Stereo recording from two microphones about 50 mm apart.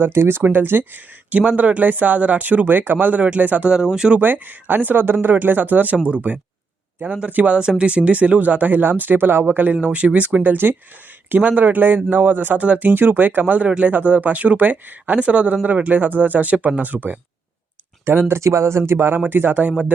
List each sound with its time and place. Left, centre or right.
0.0 s speech: right
1.3 s speech: right
3.9 s speech: centre
4.2 s speech: right
7.6 s speech: centre; by 9.6 s right
9.6 s speech: right
12.6 s speech: right
12.9 s speech: right
13.7 s speech: right
13.9 s speech: right
18.0 s speech: right
18.3 s speech: right